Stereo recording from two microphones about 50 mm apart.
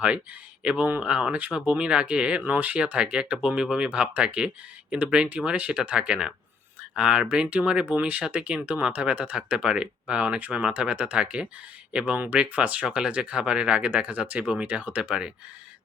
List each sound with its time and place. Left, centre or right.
0.6 s speech: right
1.3 s speech: right
2.4 s speech: right
7.9 s speech: right